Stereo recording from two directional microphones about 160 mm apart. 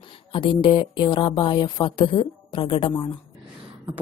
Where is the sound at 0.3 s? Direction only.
30° left (ahead or behind).